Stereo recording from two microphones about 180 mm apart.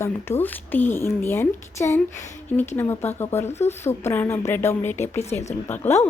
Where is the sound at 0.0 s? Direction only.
10° left (ahead or behind).